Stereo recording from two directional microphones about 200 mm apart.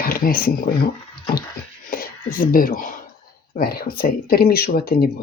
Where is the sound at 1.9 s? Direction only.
45° left (ahead or behind).